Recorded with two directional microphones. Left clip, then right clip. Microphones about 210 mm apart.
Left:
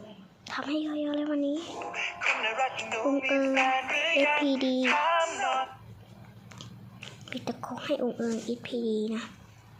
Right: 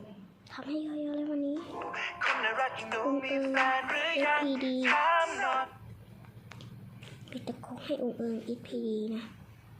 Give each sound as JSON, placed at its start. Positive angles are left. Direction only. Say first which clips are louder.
{"t": 0.4, "sound": "a woman's voice", "louder": "left 6 dB", "side_deg": 10}
{"t": 1.8, "sound": "music", "louder": "left 1 dB", "side_deg": 0}
{"t": 4.4, "sound": "a sound", "louder": "left 5 dB", "side_deg": 35}
{"t": 4.8, "sound": "music", "louder": "right 1 dB", "side_deg": 0}
{"t": 6.6, "sound": "biting", "louder": "left 6 dB", "side_deg": 10}
{"t": 7.8, "sound": "a child's voice", "louder": "left 4 dB", "side_deg": 10}